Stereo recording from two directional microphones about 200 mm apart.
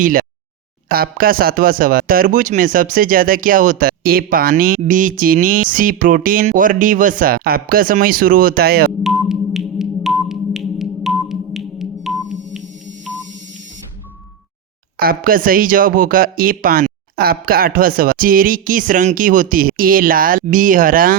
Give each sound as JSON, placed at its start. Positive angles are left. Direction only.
{"t": 0.0, "sound": "a sound", "side_deg": -45}
{"t": 0.9, "sound": "speech", "side_deg": -45}
{"t": 9.0, "sound": "music", "side_deg": 0}
{"t": 14.9, "sound": "speech", "side_deg": -45}